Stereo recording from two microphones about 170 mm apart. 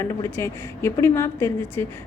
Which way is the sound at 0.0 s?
15° left (ahead or behind).